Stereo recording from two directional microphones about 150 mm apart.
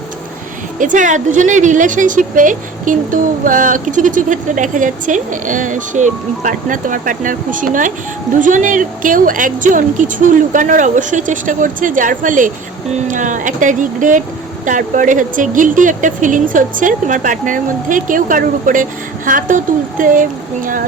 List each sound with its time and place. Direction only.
0.8 s speech: 60° right (ahead or behind)